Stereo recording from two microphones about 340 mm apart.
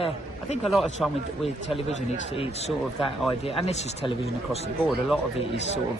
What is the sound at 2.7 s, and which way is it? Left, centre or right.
Speech, centre.